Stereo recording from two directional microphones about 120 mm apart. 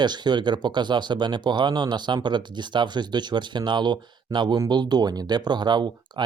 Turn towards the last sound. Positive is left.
turn(degrees=-40)  # may be behind; listen again after turning